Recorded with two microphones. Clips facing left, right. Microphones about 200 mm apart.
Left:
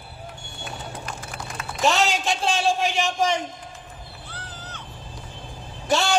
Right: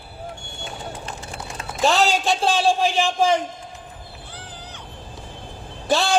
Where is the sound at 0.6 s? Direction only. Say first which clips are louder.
Right 1 dB; 25° right (ahead or behind).